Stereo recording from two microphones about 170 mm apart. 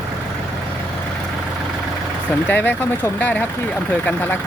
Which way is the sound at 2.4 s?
10° left (ahead or behind).